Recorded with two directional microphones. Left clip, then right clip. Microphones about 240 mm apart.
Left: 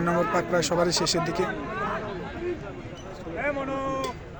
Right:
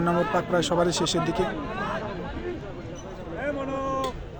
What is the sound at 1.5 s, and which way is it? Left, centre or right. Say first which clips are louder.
Chatter: even; right.